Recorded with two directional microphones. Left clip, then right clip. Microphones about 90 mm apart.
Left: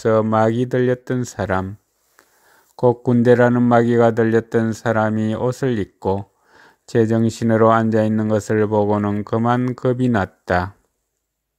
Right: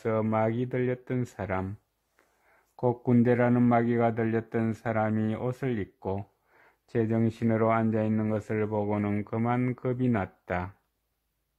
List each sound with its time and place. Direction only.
0.0 s speech: 45° left (ahead or behind)
2.7 s speech: 45° left (ahead or behind)
8.9 s speech: 10° left (ahead or behind)
9.8 s speech: 55° left (ahead or behind)